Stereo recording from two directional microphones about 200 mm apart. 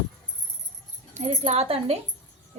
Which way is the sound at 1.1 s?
35° right (ahead or behind).